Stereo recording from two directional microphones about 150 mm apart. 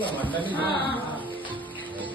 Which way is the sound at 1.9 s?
10° left (ahead or behind).